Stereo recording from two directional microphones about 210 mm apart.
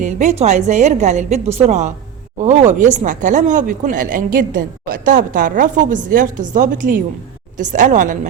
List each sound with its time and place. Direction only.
0.0 s speech: 35° right (ahead or behind)